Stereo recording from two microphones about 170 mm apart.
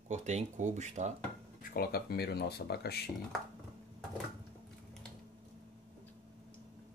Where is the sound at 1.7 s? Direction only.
65° left (ahead or behind).